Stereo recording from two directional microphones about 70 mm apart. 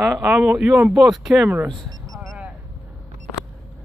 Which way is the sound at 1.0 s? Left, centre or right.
Centre.